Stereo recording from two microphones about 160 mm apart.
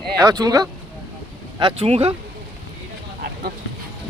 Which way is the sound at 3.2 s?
70° right (ahead or behind).